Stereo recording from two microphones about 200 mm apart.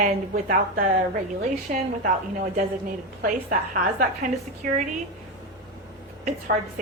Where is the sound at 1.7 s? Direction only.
40° right (ahead or behind).